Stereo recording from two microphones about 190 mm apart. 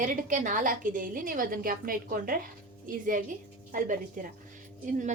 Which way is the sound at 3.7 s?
45° right (ahead or behind).